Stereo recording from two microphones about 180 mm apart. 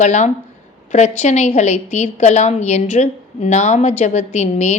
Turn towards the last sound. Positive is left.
turn(degrees=40)  # may be behind; listen again after turning